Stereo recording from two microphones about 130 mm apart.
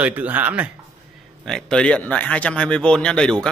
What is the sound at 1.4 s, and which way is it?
Speech, 5° left (ahead or behind).